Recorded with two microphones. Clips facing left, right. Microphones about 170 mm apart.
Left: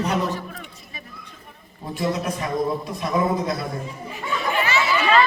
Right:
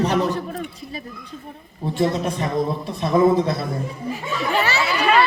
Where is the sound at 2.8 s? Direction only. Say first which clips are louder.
Right 6 dB; 30° right (ahead or behind).